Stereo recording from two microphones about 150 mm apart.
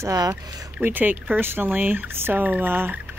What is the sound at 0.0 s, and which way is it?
Speech, 20° right (ahead or behind).